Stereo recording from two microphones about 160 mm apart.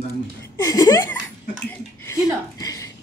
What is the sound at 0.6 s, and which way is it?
A woman's voice, 20° left (ahead or behind).